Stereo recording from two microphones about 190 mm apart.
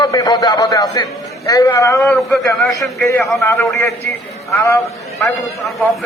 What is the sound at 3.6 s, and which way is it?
A man's voice, 15° left (ahead or behind).